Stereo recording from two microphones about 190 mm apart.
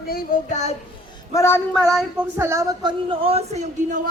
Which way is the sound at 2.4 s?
15° right (ahead or behind).